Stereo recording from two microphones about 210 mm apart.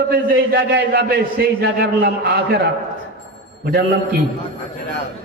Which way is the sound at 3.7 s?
45° right (ahead or behind).